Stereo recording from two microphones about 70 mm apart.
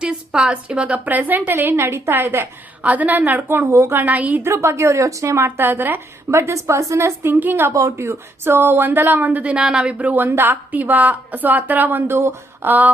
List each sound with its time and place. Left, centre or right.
0.0 s a woman's voice: centre; by 3.7 s right
3.7 s a woman's voice: right
3.9 s a woman's voice: right
4.4 s a woman's voice: right
5.5 s speech: right
6.5 s speech: right
7.7 s speech: right; by 9.9 s centre
10.0 s a woman's voice: right